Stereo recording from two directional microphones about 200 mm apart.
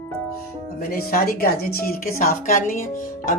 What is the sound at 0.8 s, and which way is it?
Speech, 50° left (ahead or behind).